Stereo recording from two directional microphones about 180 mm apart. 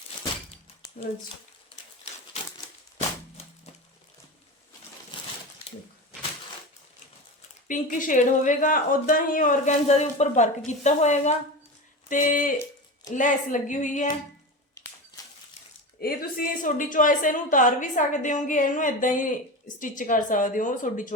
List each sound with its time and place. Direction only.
7.7 s speech: 50° left (ahead or behind)
14.8 s a sound: 20° left (ahead or behind)
16.0 s speech: 55° left (ahead or behind)